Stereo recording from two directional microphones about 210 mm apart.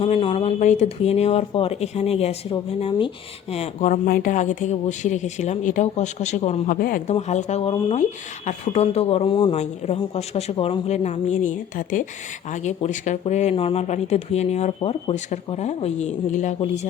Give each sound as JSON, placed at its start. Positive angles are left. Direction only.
{"t": 0.0, "sound": "speech", "side_deg": 25}
{"t": 6.7, "sound": "speech", "side_deg": 45}
{"t": 7.1, "sound": "speech", "side_deg": 35}